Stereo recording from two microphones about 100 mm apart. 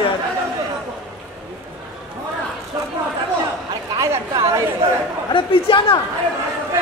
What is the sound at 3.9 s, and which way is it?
Speech, 35° right (ahead or behind).